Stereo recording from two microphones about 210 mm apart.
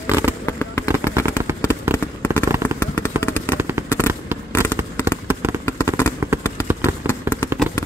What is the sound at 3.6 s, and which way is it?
Fireworks, 10° right (ahead or behind).